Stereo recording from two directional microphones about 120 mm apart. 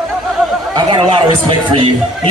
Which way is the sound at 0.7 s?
40° right (ahead or behind).